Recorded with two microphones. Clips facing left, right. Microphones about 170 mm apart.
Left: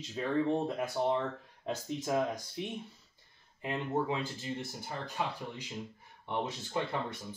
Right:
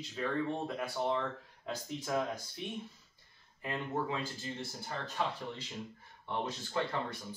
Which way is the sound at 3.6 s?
20° left (ahead or behind).